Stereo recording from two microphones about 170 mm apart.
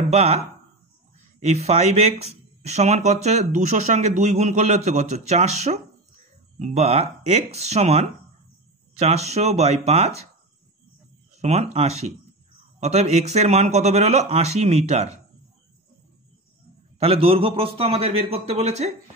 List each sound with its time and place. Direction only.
0.1 s speech: 40° right (ahead or behind)
1.4 s speech: 40° right (ahead or behind)
11.3 s speech: 40° right (ahead or behind)
17.0 s speech: 35° right (ahead or behind)